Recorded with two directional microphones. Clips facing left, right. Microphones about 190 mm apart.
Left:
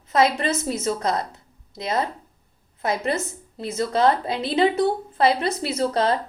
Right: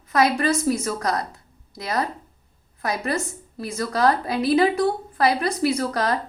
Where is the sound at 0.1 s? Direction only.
25° left (ahead or behind).